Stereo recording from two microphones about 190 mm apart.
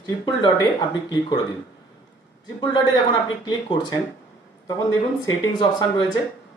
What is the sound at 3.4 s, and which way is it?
Speech, 20° left (ahead or behind).